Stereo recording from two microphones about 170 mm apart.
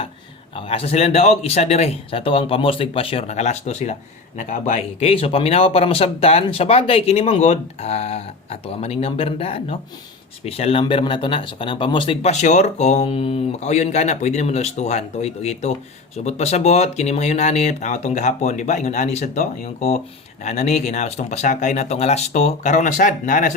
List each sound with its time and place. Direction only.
0.5 s speech: 35° left (ahead or behind); by 23.6 s 50° left (ahead or behind)